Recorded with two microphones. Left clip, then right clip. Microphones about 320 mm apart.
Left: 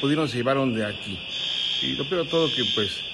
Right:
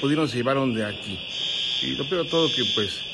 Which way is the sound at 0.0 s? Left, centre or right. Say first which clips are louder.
Even; centre.